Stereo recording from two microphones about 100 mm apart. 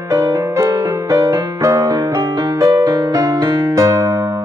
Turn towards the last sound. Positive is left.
turn(degrees=-30)  # may be behind; listen again after turning